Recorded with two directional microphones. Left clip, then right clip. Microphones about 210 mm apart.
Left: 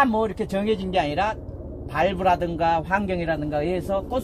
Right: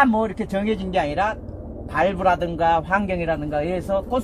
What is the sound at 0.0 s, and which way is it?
A man's voice, centre (ahead or behind).